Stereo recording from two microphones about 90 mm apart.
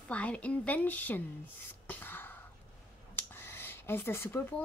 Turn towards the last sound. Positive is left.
turn(degrees=25)  # may be behind; listen again after turning